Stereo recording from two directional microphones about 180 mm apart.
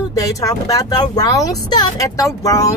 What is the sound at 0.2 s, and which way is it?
Speech, 20° left (ahead or behind).